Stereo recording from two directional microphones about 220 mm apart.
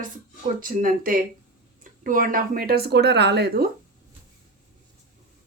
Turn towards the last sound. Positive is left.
turn(degrees=-45)  # may be behind; listen again after turning